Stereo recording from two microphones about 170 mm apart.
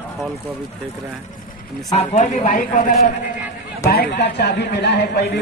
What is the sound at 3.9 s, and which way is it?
Speech, 70° left (ahead or behind).